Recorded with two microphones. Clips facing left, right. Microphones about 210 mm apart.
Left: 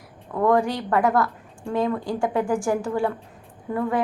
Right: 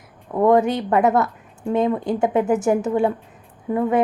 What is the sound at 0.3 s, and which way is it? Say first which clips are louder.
A woman's voice: right 4 dB; 20° right (ahead or behind).